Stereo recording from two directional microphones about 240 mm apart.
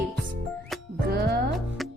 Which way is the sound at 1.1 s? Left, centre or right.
Right.